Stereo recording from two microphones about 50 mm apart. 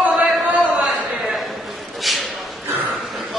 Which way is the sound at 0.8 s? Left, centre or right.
Centre.